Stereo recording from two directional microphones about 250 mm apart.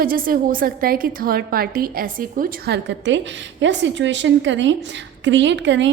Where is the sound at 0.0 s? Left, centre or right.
Right.